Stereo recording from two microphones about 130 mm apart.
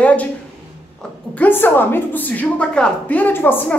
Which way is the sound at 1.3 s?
15° left (ahead or behind).